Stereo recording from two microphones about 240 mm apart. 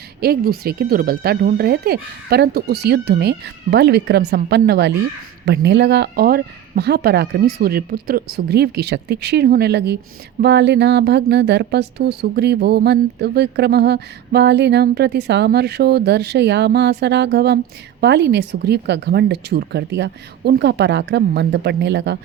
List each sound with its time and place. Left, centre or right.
0.2 s speech: right